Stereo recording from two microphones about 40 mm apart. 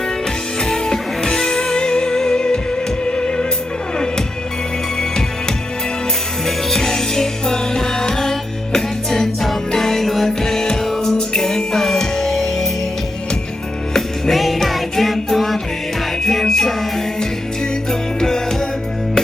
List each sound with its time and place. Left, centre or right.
0.6 s music: centre
6.7 s music: centre
13.9 s music: centre